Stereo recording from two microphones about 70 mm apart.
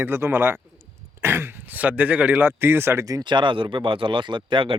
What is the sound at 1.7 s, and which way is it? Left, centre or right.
Speech, right.